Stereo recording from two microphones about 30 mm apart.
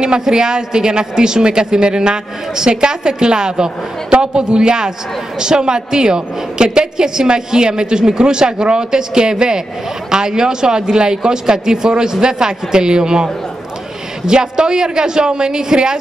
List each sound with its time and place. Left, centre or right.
0.2 s a woman's voice: right